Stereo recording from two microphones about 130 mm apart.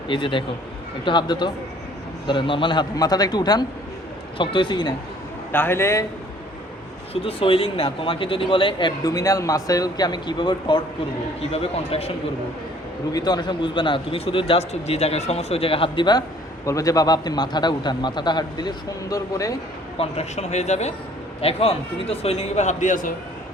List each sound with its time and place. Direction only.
0.1 s a man's voice: 40° left (ahead or behind)
5.5 s speech: 15° left (ahead or behind)
7.1 s a man's voice: 45° left (ahead or behind)
9.0 s speech: 25° left (ahead or behind)
11.5 s a man's voice: 50° left (ahead or behind)
13.1 s a man's voice: 30° left (ahead or behind)
16.6 s a man's voice: 25° left (ahead or behind)
20.0 s speech: 60° left (ahead or behind)
21.4 s a man's voice: 50° left (ahead or behind); by 23.1 s 85° left